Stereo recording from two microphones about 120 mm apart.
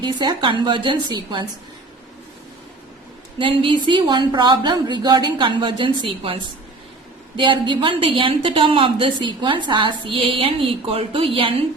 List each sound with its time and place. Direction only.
0.0 s a woman's voice: 40° right (ahead or behind)
3.3 s a woman's voice: 45° right (ahead or behind)
7.3 s a woman's voice: 45° right (ahead or behind)